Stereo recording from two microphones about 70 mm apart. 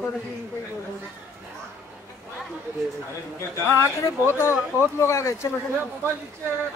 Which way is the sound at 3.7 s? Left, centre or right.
Left.